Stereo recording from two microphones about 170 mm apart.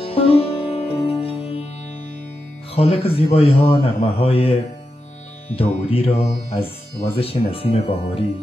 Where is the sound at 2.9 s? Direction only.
35° left (ahead or behind).